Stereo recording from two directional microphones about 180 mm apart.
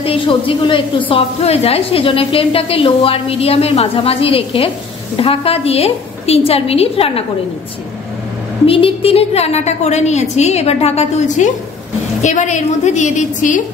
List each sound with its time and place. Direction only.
0.0 s a woman's voice: 30° left (ahead or behind)
8.6 s a woman's voice: 30° left (ahead or behind)